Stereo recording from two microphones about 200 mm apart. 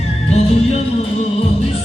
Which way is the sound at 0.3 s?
30° left (ahead or behind).